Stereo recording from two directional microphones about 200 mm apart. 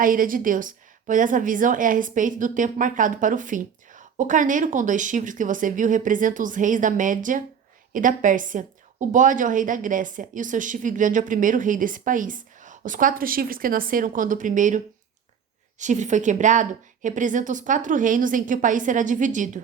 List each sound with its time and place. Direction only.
0.0 s a woman's voice: 45° right (ahead or behind)
15.8 s a woman's voice: 35° right (ahead or behind)